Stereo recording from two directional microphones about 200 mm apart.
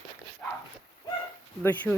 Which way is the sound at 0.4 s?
10° left (ahead or behind).